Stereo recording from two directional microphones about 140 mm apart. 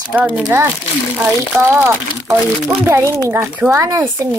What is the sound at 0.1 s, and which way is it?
Speech, 10° right (ahead or behind).